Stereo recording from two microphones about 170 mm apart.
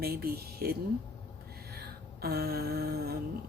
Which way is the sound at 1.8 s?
65° right (ahead or behind).